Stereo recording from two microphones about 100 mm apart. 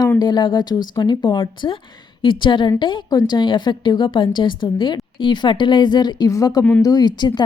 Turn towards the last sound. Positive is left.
turn(degrees=45)  # may be behind; listen again after turning